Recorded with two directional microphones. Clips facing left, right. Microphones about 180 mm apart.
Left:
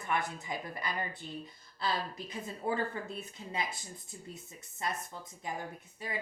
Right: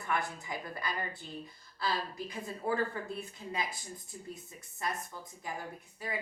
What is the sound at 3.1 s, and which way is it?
Speech, 25° left (ahead or behind).